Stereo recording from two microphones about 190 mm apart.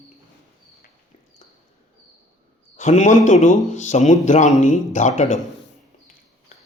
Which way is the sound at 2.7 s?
40° left (ahead or behind).